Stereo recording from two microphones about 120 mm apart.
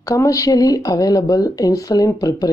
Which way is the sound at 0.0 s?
30° left (ahead or behind).